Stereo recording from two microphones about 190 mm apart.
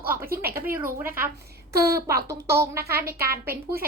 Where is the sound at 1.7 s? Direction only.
55° right (ahead or behind).